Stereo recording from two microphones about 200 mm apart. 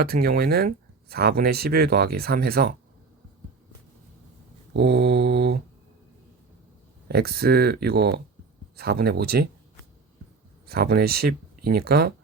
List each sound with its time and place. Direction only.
0.0 s speech: 50° right (ahead or behind)
4.7 s mantra: 55° right (ahead or behind)
7.1 s speech: 50° right (ahead or behind)
10.7 s speech: 50° right (ahead or behind)